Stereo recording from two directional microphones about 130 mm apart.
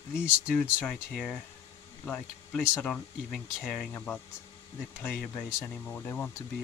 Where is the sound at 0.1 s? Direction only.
10° right (ahead or behind).